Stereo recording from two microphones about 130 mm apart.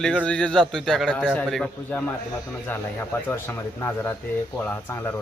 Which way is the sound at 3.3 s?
15° left (ahead or behind).